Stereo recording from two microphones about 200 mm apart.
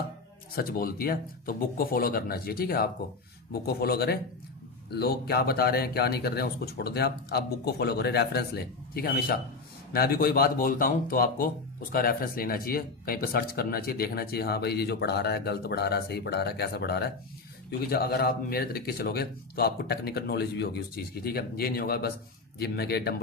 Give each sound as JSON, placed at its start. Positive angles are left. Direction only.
{"t": 0.5, "sound": "speech", "side_deg": 45}